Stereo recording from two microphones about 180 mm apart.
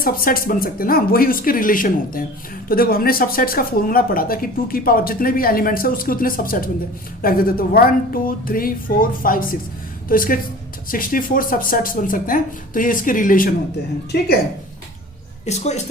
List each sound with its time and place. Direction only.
0.0 s speech: 50° left (ahead or behind)
15.4 s speech: 40° left (ahead or behind)